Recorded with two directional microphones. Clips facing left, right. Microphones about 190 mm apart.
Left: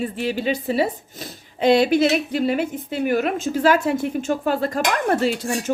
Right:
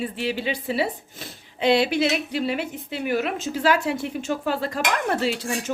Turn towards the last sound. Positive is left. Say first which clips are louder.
# left 4 dB
turn(degrees=45)  # may be behind; listen again after turning